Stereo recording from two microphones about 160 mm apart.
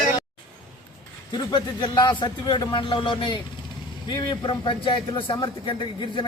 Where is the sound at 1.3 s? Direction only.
25° left (ahead or behind).